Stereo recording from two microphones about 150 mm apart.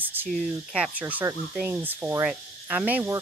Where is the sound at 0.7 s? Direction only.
10° right (ahead or behind).